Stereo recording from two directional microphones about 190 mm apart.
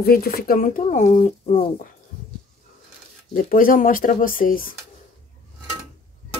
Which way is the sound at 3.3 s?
45° left (ahead or behind).